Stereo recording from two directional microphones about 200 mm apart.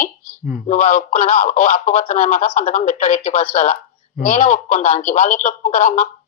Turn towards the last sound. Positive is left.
turn(degrees=35)  # may be behind; listen again after turning